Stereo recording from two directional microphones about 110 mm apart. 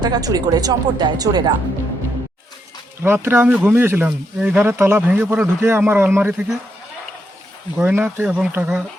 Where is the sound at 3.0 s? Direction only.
20° right (ahead or behind).